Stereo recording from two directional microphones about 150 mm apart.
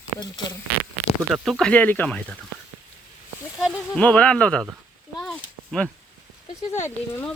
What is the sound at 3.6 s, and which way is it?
Speech, 5° right (ahead or behind).